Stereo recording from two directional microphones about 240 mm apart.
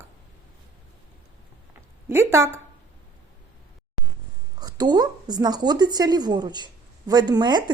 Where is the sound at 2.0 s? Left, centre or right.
Centre.